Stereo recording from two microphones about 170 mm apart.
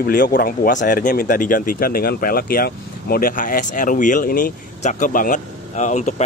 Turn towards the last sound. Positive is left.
turn(degrees=45)  # may be behind; listen again after turning